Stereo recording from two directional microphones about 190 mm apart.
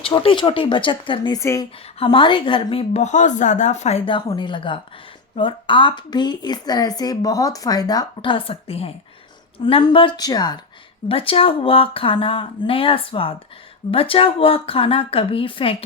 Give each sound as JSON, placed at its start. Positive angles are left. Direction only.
{"t": 0.0, "sound": "speech", "side_deg": 25}